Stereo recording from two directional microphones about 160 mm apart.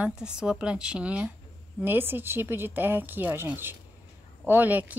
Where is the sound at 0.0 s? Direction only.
5° right (ahead or behind).